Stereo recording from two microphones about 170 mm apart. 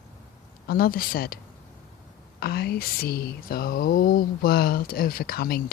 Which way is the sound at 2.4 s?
65° left (ahead or behind).